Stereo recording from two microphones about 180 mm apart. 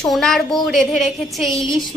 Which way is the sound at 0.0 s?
Centre (ahead or behind).